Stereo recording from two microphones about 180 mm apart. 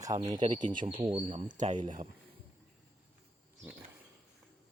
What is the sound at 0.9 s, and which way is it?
Speech, 25° right (ahead or behind).